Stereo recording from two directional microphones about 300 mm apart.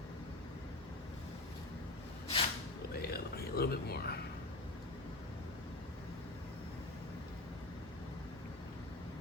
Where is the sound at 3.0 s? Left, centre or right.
Left.